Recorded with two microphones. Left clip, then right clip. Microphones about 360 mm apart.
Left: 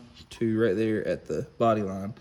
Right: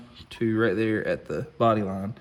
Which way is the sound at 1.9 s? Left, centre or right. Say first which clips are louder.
Right 2 dB; right.